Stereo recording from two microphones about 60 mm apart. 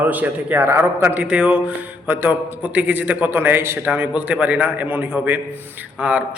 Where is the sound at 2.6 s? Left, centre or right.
Right.